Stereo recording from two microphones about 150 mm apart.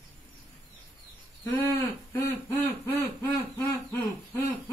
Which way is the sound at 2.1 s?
20° left (ahead or behind).